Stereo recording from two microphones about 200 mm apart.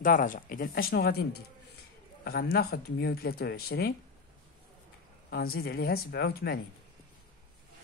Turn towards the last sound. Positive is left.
turn(degrees=50)  # may be behind; listen again after turning